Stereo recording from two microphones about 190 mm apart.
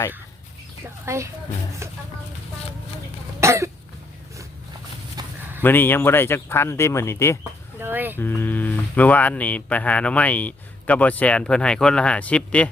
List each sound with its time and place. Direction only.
1.0 s speech: 15° right (ahead or behind)
1.8 s a sound: 15° right (ahead or behind)
3.4 s cough: 15° right (ahead or behind)
5.2 s a sound: 20° right (ahead or behind)
5.6 s speech: 10° left (ahead or behind)
7.8 s speech: 10° right (ahead or behind)
8.2 s speech: 10° left (ahead or behind)